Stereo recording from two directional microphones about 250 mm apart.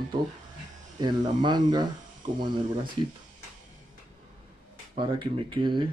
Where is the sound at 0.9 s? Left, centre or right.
Centre.